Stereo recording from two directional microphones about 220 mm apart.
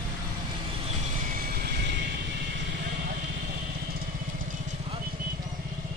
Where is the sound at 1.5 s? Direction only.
50° right (ahead or behind).